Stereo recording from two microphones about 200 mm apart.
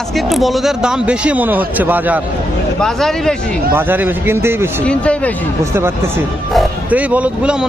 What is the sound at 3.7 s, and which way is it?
Speech, 10° right (ahead or behind).